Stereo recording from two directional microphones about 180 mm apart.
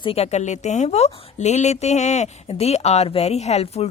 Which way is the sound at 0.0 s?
35° left (ahead or behind).